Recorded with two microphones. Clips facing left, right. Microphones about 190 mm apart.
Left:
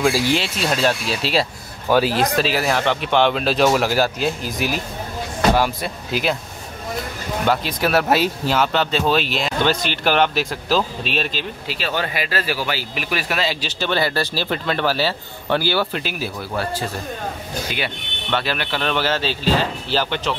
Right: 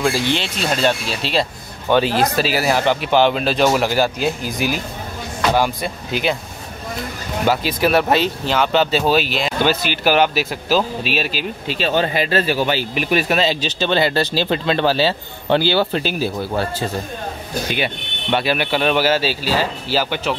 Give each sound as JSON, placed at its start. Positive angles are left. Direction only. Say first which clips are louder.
{"t": 0.0, "sound": "speech", "louder": "left 1 dB", "side_deg": 5}
{"t": 7.4, "sound": "speech", "louder": "right 3 dB", "side_deg": 0}
{"t": 8.9, "sound": "speech", "louder": "right 2 dB", "side_deg": -5}
{"t": 11.6, "sound": "speech", "louder": "right 7 dB", "side_deg": -25}
{"t": 17.7, "sound": "speech", "louder": "right 4 dB", "side_deg": -15}